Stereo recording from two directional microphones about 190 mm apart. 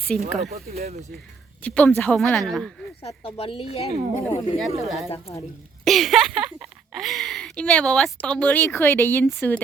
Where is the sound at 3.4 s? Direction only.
30° left (ahead or behind).